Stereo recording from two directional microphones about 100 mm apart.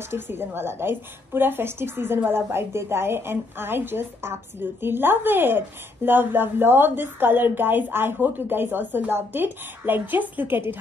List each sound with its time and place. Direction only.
0.1 s a woman's voice: 20° right (ahead or behind)